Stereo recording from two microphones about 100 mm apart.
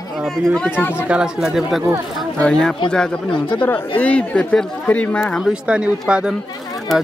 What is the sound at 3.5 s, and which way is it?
Speech, 20° left (ahead or behind).